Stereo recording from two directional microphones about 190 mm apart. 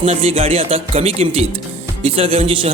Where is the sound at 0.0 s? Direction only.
35° right (ahead or behind).